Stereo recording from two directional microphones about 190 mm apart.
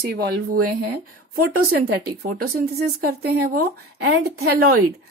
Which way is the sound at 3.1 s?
55° right (ahead or behind).